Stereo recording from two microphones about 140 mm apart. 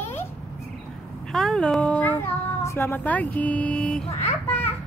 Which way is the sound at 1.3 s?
5° left (ahead or behind).